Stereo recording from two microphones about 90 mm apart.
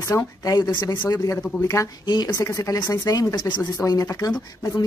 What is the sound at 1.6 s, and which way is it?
Speech, 30° left (ahead or behind).